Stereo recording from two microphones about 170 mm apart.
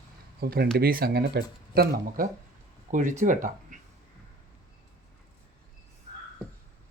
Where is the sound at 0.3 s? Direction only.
65° right (ahead or behind).